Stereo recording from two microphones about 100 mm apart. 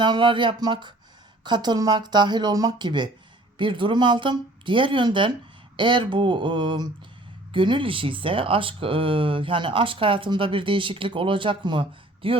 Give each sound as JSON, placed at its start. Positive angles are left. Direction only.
{"t": 0.0, "sound": "speech", "side_deg": -50}